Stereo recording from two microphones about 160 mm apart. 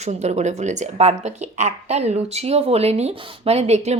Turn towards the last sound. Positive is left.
turn(degrees=-45)  # may be behind; listen again after turning